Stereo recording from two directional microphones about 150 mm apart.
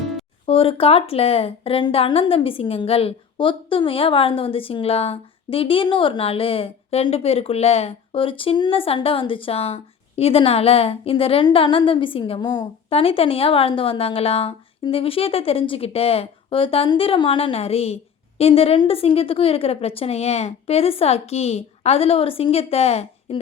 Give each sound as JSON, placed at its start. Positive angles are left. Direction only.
{"t": 0.4, "sound": "a woman's voice", "side_deg": 40}
{"t": 12.9, "sound": "a woman's voice", "side_deg": 40}